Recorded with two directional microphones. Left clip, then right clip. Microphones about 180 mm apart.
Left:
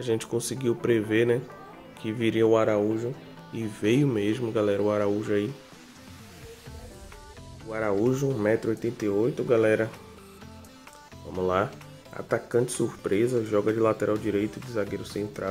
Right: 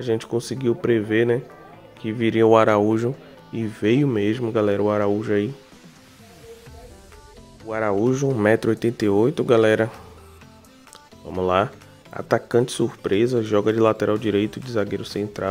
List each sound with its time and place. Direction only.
0.0 s speech: 20° right (ahead or behind)
2.4 s speech: 45° right (ahead or behind)
3.5 s speech: 25° right (ahead or behind)
7.7 s speech: 35° right (ahead or behind)
8.5 s speech: 40° right (ahead or behind)
11.2 s speech: 25° right (ahead or behind)